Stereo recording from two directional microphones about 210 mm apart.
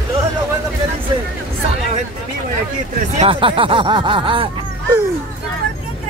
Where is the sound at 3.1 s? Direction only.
25° right (ahead or behind).